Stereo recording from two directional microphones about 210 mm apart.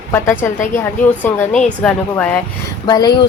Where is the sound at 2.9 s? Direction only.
20° left (ahead or behind).